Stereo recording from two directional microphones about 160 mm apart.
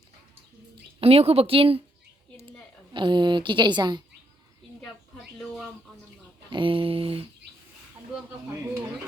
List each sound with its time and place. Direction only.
0.9 s a woman's voice: 40° right (ahead or behind)
2.9 s a woman's voice: 30° right (ahead or behind)
4.8 s a sound: 5° left (ahead or behind)
6.5 s a woman's voice: 30° right (ahead or behind)